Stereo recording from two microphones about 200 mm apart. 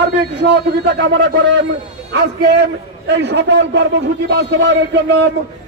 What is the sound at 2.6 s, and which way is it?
A man's voice, 60° right (ahead or behind).